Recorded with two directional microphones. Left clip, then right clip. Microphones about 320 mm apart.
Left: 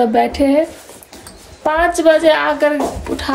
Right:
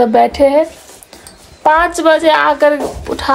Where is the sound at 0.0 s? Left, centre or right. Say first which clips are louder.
Right 5 dB; centre.